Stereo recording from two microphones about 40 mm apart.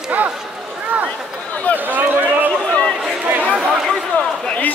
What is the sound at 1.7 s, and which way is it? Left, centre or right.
Run, right.